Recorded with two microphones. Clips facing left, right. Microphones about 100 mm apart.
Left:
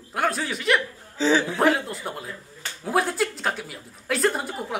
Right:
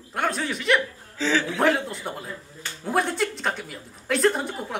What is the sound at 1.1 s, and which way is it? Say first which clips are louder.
Speech: left 3 dB; 25° left (ahead or behind).